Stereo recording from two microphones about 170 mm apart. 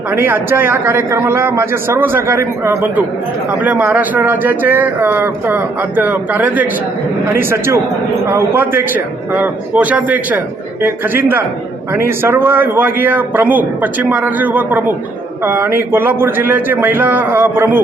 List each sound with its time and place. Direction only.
0.1 s speech: 10° right (ahead or behind)